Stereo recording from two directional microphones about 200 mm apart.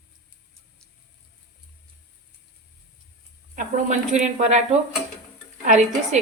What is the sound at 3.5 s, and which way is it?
A woman's voice, 35° right (ahead or behind).